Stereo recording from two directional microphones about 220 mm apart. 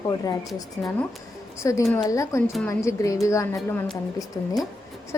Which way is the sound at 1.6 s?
15° left (ahead or behind).